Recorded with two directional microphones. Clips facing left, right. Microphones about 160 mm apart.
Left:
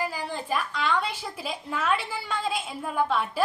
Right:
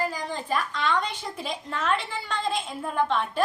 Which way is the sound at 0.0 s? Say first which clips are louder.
Right 1 dB; 10° left (ahead or behind).